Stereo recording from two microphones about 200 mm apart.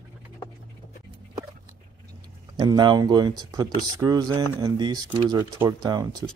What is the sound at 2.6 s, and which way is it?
Speech, 20° right (ahead or behind).